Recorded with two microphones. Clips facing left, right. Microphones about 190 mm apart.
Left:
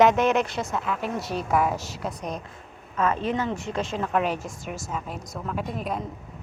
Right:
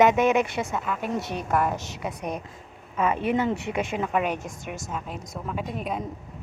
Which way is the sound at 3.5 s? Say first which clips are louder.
Right 1 dB; 60° right (ahead or behind).